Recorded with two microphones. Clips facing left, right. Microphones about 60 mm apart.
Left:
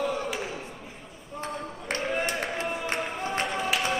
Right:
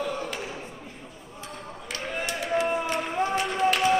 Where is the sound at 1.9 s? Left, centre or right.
Left.